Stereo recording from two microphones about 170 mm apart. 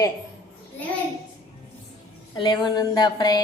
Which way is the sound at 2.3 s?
25° left (ahead or behind).